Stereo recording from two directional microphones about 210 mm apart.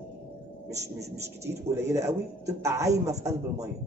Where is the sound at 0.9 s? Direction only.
15° right (ahead or behind).